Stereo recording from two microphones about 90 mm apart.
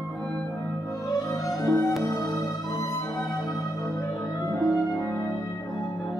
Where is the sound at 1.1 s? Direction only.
45° left (ahead or behind).